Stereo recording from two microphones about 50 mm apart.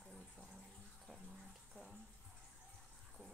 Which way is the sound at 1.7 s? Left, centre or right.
Centre.